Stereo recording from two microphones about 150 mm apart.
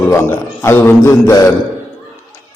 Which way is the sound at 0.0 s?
15° left (ahead or behind).